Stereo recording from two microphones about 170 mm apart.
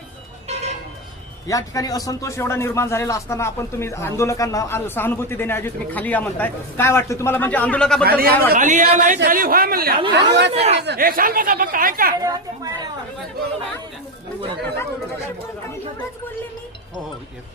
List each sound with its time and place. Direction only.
0.4 s vehicle: 40° right (ahead or behind)
1.5 s speech: 20° left (ahead or behind)
8.0 s a man's voice: 65° right (ahead or behind)
10.1 s speech: 85° right
10.5 s speech: 40° right (ahead or behind)
10.8 s a man's voice: 70° right (ahead or behind); by 12.1 s 55° right (ahead or behind)
12.2 s speech: 20° right (ahead or behind)